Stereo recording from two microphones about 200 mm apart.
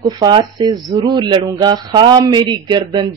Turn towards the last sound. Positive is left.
turn(degrees=-20)  # may be behind; listen again after turning